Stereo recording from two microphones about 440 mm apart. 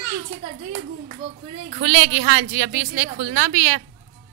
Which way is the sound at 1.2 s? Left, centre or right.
Centre.